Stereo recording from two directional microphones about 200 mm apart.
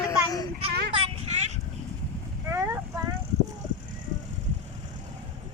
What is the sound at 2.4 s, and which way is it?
Vehicle, 15° right (ahead or behind).